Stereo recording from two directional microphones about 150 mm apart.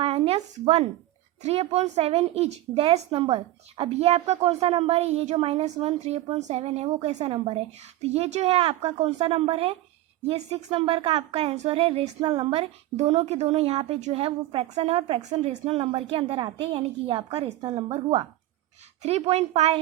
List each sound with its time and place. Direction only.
0.0 s a woman's voice: 40° right (ahead or behind)
19.0 s a woman's voice: 45° right (ahead or behind)